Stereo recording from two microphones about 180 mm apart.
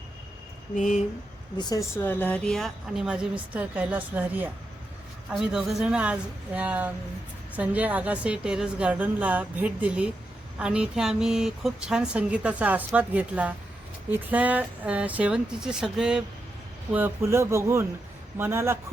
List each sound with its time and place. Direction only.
0.8 s speech: 45° left (ahead or behind)
1.5 s speech: 20° left (ahead or behind)
2.0 s a woman's voice: 10° left (ahead or behind); by 18.8 s 15° right (ahead or behind)